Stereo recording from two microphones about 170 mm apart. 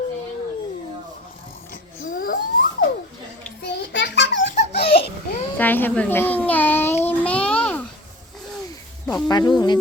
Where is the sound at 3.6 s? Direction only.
85° left.